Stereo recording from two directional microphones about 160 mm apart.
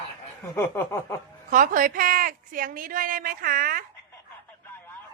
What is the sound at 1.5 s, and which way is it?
A woman's voice, 55° right (ahead or behind).